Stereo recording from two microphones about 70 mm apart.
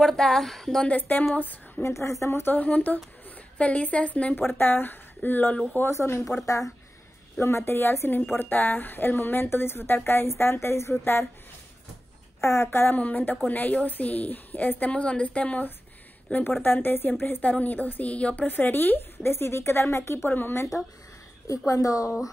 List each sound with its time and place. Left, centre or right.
0.0 s a woman's voice: centre
0.8 s speech: left
1.8 s speech: left; by 4.4 s centre
4.6 s speech: left
5.8 s a woman's voice: left
8.4 s speech: left
12.4 s speech: left
12.9 s a woman's voice: left
21.5 s a woman's voice: left